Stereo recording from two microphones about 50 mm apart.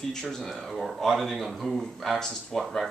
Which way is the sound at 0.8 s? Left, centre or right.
Centre.